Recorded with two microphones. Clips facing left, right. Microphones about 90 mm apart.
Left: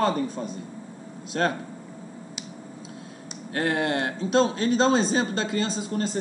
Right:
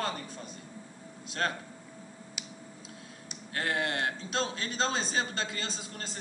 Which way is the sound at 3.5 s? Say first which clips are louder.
Left 7 dB; 25° left (ahead or behind).